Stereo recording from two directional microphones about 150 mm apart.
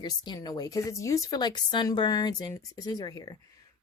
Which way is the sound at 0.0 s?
30° left (ahead or behind).